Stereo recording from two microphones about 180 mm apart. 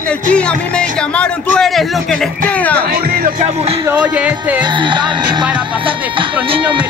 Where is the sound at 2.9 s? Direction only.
50° right (ahead or behind).